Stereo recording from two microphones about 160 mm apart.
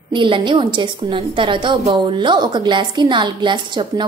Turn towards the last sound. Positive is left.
turn(degrees=-30)  # may be behind; listen again after turning